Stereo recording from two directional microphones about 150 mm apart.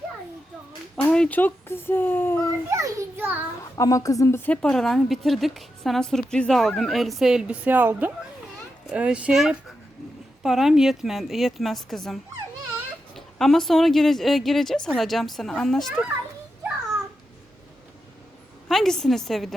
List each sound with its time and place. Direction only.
1.0 s speech: 10° left (ahead or behind)
2.6 s a child's voice: 20° right (ahead or behind)
3.6 s a woman's voice: 20° left (ahead or behind); by 16.0 s centre (ahead or behind)
18.7 s a woman's voice: 5° left (ahead or behind)